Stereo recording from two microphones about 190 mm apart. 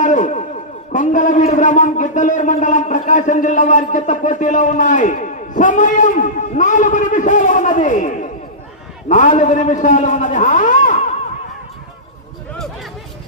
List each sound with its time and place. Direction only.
0.0 s a man's voice: 40° left (ahead or behind)